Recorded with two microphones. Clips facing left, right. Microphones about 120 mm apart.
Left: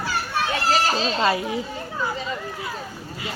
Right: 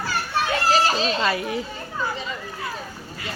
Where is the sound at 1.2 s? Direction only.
20° left (ahead or behind).